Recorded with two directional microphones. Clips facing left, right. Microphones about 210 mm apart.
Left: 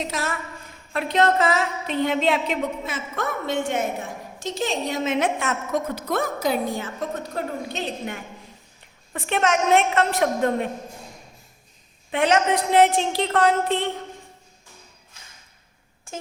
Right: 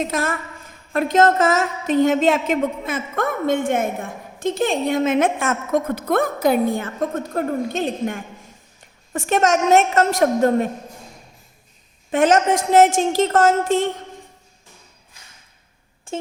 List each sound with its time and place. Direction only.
0.0 s a woman's voice: 50° right (ahead or behind)
12.1 s a woman's voice: 45° right (ahead or behind)